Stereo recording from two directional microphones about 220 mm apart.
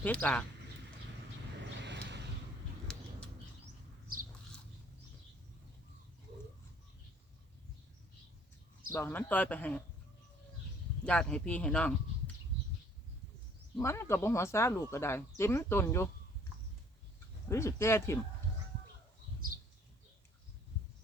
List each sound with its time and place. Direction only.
0.0 s speech: 5° left (ahead or behind)
1.8 s a sound: 50° right (ahead or behind)
8.9 s speech: 10° left (ahead or behind)
11.0 s speech: 5° left (ahead or behind)
13.7 s speech: 10° left (ahead or behind)
17.5 s speech: 10° left (ahead or behind)